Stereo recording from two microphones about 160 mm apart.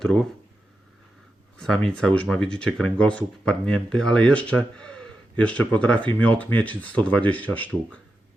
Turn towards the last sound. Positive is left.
turn(degrees=10)  # may be behind; listen again after turning